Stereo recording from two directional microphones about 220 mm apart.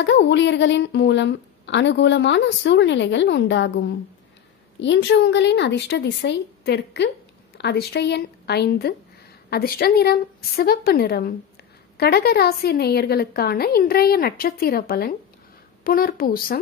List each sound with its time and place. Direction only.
0.0 s a woman's voice: 55° left (ahead or behind)